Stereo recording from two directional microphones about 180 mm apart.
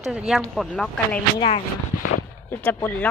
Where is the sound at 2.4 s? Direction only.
10° left (ahead or behind).